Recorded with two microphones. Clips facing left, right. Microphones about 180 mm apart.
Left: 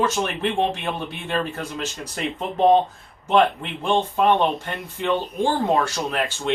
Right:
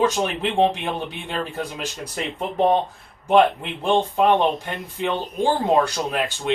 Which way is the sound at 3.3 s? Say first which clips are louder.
Right 2 dB; 15° right (ahead or behind).